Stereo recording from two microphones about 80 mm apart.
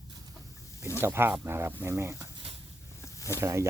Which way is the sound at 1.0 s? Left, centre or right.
Right.